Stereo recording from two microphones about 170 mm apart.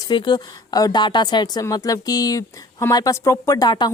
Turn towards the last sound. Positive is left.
turn(degrees=25)  # may be behind; listen again after turning